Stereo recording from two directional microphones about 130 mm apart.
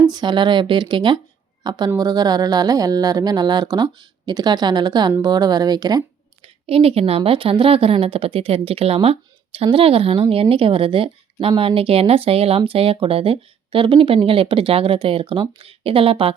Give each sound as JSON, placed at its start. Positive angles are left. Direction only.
{"t": 0.0, "sound": "a woman's voice", "side_deg": -35}
{"t": 6.4, "sound": "a woman's voice", "side_deg": -50}